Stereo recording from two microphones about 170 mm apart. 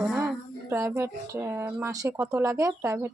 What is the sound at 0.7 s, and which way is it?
Speech, 15° right (ahead or behind).